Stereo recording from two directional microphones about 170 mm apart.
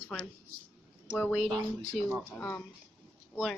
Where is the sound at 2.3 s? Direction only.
10° left (ahead or behind).